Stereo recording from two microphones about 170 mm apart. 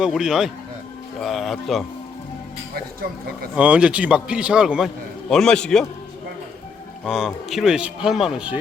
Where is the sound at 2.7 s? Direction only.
60° right (ahead or behind).